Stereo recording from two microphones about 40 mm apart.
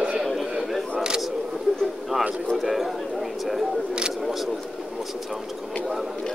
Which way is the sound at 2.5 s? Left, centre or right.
Centre.